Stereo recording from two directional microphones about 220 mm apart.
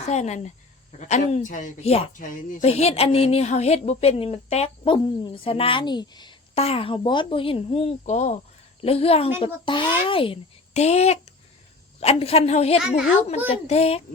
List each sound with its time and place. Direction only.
0.0 s speech: 30° left (ahead or behind)